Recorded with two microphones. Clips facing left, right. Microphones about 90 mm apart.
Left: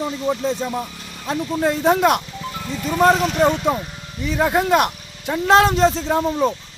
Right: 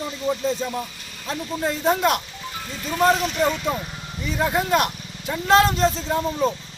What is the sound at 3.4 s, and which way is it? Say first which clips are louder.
Speech: left 5 dB; 20° left (ahead or behind).